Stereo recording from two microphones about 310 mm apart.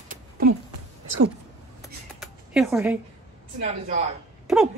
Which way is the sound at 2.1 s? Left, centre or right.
Centre.